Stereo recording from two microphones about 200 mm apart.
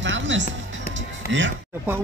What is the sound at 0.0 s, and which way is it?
Music, 65° right (ahead or behind).